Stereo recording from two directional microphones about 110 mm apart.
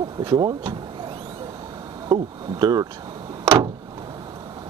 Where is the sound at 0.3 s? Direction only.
45° right (ahead or behind).